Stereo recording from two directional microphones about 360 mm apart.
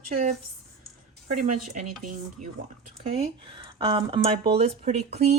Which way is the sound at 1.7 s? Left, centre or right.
Centre.